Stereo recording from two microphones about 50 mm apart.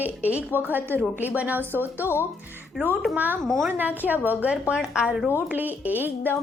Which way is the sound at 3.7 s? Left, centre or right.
Right.